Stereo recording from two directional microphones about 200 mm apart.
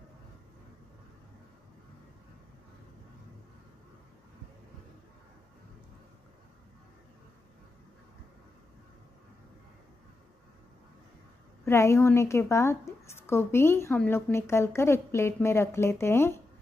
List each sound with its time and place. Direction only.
11.6 s a woman's voice: 15° left (ahead or behind)